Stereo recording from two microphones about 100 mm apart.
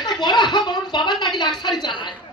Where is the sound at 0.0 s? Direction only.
45° left (ahead or behind).